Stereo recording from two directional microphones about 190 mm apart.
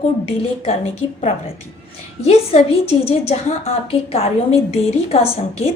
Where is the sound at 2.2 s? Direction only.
35° left (ahead or behind).